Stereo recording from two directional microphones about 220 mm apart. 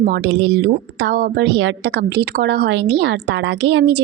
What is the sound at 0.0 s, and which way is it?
A woman's voice, 50° right (ahead or behind).